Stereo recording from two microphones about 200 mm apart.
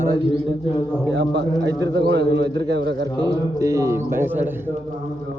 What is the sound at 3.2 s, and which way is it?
A man's voice, 15° right (ahead or behind).